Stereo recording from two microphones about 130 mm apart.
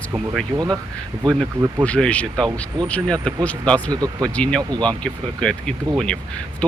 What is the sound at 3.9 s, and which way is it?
Speech, 30° right (ahead or behind).